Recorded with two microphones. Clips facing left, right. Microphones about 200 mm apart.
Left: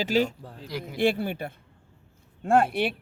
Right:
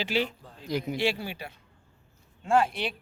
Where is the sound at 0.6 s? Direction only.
20° right (ahead or behind).